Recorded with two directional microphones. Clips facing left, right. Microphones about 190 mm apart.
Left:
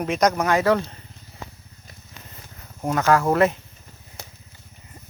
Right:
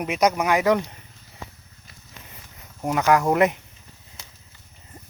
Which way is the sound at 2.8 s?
15° right (ahead or behind).